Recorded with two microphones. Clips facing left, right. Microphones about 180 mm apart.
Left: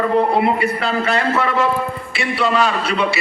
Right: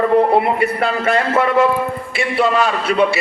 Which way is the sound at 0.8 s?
50° right (ahead or behind).